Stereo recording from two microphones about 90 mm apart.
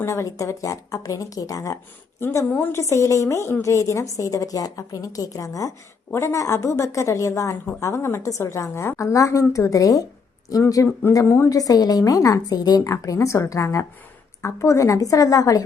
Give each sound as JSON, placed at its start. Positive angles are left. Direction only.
{"t": 0.0, "sound": "a woman's voice", "side_deg": 35}
{"t": 2.2, "sound": "a woman's voice", "side_deg": 30}
{"t": 2.9, "sound": "a woman's voice", "side_deg": 35}
{"t": 12.9, "sound": "a woman's voice", "side_deg": 35}